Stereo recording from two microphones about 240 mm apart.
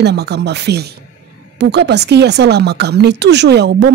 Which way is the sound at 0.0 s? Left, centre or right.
Right.